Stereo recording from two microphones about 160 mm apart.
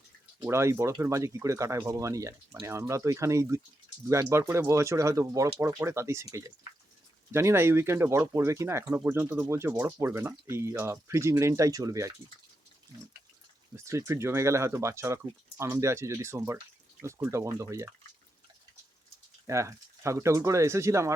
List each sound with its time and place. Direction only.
0.4 s speech: 15° right (ahead or behind)
7.3 s speech: 15° right (ahead or behind)
13.7 s speech: 20° right (ahead or behind)
19.5 s speech: 20° right (ahead or behind)